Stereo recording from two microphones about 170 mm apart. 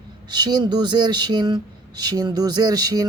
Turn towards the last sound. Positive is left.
turn(degrees=-25)  # may be behind; listen again after turning